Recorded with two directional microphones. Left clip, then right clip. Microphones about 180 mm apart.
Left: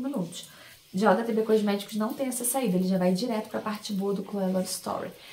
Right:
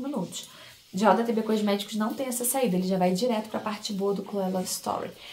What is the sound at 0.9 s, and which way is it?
A woman's voice, 20° right (ahead or behind).